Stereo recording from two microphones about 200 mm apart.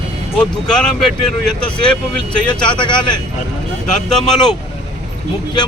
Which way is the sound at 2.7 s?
25° left (ahead or behind).